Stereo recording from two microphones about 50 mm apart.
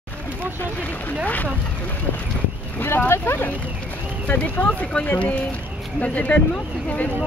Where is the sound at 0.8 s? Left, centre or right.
Left.